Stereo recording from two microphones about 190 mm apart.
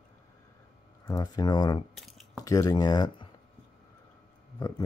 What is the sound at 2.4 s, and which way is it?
Speech, 20° left (ahead or behind).